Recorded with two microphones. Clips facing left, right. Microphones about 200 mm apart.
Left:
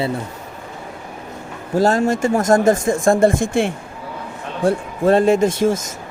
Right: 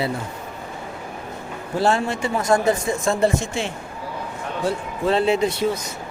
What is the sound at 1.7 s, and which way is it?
Speech, 40° left (ahead or behind).